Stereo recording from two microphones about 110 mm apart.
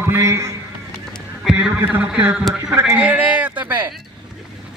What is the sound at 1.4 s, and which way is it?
Speech, 10° right (ahead or behind).